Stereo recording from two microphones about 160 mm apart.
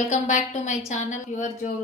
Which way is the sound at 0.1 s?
50° left (ahead or behind).